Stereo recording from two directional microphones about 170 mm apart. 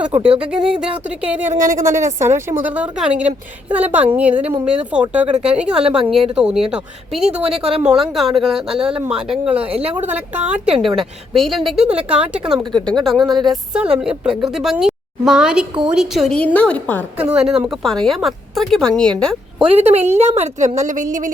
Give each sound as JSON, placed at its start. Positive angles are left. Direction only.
{"t": 0.0, "sound": "a woman's voice", "side_deg": -5}
{"t": 7.4, "sound": "a woman's voice", "side_deg": -35}
{"t": 8.1, "sound": "a woman's voice", "side_deg": 0}
{"t": 17.3, "sound": "a woman's voice", "side_deg": -5}
{"t": 19.7, "sound": "a woman's voice", "side_deg": -40}